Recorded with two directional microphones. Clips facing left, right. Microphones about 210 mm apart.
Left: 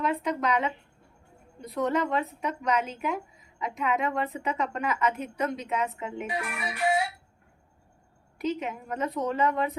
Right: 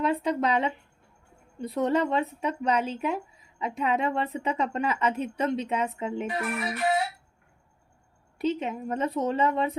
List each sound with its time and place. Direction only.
0.0 s speech: 30° right (ahead or behind)
6.2 s speech: 10° left (ahead or behind)
8.4 s speech: 30° right (ahead or behind)